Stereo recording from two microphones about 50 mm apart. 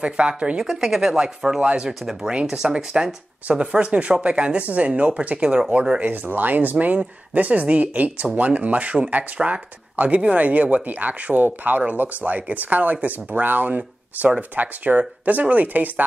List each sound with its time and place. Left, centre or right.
0.0 s speech: right
0.7 s speech: centre; by 15.9 s right